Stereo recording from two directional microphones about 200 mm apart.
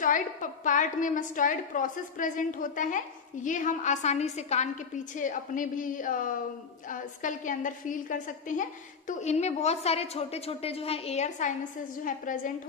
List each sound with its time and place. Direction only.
0.0 s a woman's voice: 40° left (ahead or behind)